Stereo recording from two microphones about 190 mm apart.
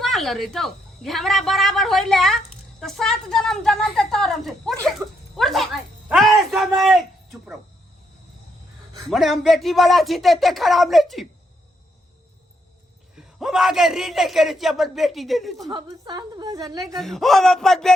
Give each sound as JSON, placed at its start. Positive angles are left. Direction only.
{"t": 0.0, "sound": "a woman's voice", "side_deg": 0}
{"t": 4.9, "sound": "dog", "side_deg": 0}
{"t": 6.1, "sound": "music", "side_deg": 0}
{"t": 9.0, "sound": "a woman's voice", "side_deg": 0}
{"t": 13.1, "sound": "a woman's voice", "side_deg": 0}
{"t": 15.6, "sound": "a woman's voice", "side_deg": -20}
{"t": 17.0, "sound": "a woman's voice", "side_deg": 0}